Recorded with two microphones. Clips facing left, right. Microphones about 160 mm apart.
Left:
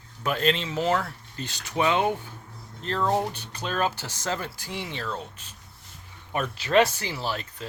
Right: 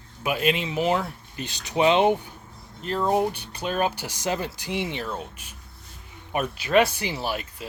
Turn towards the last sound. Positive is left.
turn(degrees=-15)  # may be behind; listen again after turning